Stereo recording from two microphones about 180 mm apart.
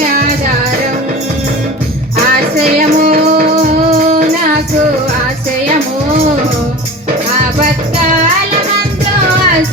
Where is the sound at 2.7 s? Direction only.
50° right (ahead or behind).